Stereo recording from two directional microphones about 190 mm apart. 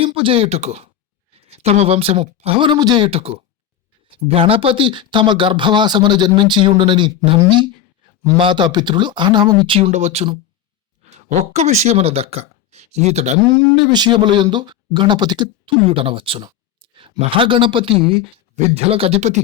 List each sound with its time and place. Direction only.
0.0 s speech: 30° right (ahead or behind)
13.6 s speech: 25° right (ahead or behind)